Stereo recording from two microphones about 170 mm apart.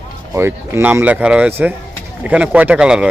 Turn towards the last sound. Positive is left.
turn(degrees=-5)  # may be behind; listen again after turning